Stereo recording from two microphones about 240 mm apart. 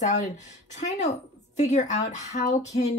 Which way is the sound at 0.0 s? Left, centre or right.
Left.